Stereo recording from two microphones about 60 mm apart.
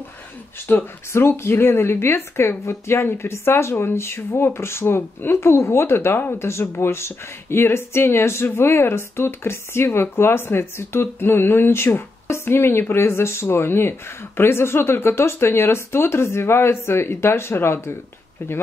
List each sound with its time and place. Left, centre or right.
0.7 s speech: left
1.1 s speech: left